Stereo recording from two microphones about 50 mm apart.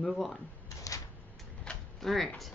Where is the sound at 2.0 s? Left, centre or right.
Centre.